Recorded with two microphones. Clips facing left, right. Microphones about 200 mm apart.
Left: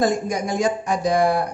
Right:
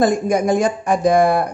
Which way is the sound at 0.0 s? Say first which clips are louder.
Right 5 dB; 55° right (ahead or behind).